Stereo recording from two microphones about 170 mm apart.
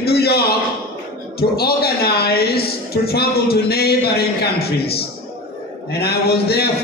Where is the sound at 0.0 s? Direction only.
70° left (ahead or behind).